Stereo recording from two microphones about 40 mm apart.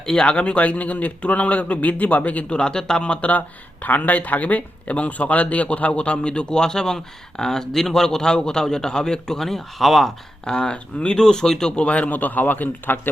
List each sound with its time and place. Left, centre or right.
0.0 s a man's voice: centre; by 2.5 s left
2.5 s speech: left
3.8 s speech: left; by 10.1 s centre
10.4 s speech: centre
11.8 s a man's voice: left